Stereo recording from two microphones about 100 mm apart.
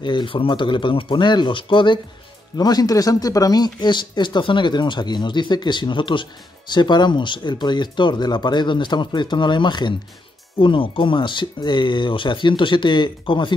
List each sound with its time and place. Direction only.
0.0 s speech: 50° left (ahead or behind)
2.5 s speech: 40° left (ahead or behind)